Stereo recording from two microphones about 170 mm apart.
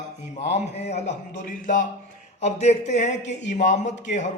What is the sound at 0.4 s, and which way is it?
Speech, 40° left (ahead or behind).